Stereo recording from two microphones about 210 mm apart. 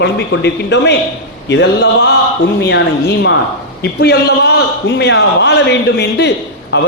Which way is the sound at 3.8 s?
50° left (ahead or behind).